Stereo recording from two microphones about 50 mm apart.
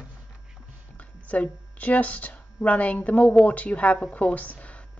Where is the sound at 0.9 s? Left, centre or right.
Left.